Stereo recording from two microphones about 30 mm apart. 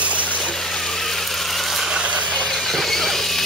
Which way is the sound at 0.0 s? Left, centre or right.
Right.